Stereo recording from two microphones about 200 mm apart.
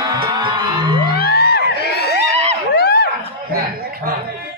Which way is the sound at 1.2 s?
50° left (ahead or behind).